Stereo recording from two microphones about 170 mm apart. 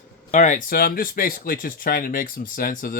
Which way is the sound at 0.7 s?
65° left (ahead or behind).